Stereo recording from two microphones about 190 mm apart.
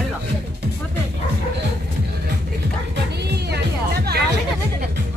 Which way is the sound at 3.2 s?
60° right (ahead or behind).